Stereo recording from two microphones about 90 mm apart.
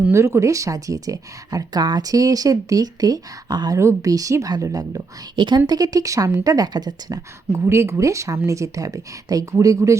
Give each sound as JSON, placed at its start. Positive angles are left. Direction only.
{"t": 0.1, "sound": "speech", "side_deg": -30}
{"t": 3.8, "sound": "speech", "side_deg": -35}
{"t": 5.4, "sound": "a woman's voice", "side_deg": -55}
{"t": 7.5, "sound": "speech", "side_deg": -30}